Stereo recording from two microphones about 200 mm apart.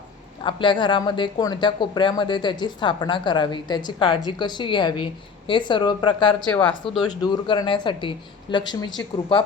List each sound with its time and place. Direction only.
0.4 s speech: 25° left (ahead or behind)
6.4 s speech: 5° left (ahead or behind)
7.2 s speech: 20° left (ahead or behind)